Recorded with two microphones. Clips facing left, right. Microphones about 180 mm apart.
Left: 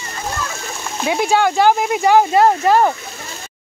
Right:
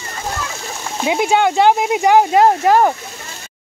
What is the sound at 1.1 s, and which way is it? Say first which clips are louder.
Speech: right 1 dB; 20° right (ahead or behind).